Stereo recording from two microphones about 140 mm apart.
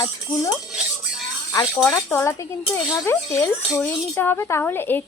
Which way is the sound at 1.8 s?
20° left (ahead or behind).